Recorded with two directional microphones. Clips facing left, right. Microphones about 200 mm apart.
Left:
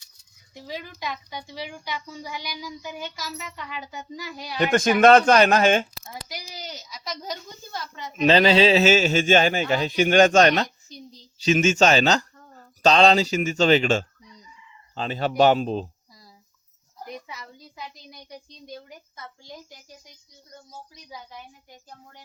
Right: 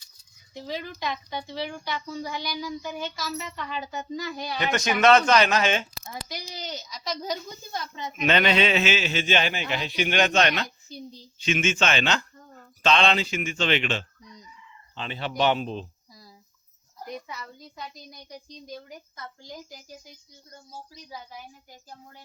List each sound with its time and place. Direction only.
0.5 s speech: 10° left (ahead or behind)
4.6 s a man's voice: 50° left (ahead or behind)
6.2 s speech: 10° left (ahead or behind)
7.7 s speech: 20° right (ahead or behind)
8.1 s a man's voice: 30° left (ahead or behind)
10.8 s a woman's voice: 5° right (ahead or behind)
11.4 s speech: 40° left (ahead or behind)
17.2 s a woman's voice: 10° left (ahead or behind)